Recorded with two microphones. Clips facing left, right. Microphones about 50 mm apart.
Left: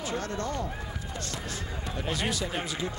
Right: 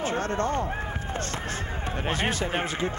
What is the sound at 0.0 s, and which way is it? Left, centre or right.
Speech, right.